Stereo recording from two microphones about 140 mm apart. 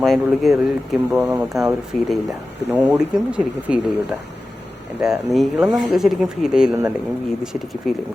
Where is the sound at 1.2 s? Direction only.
15° right (ahead or behind).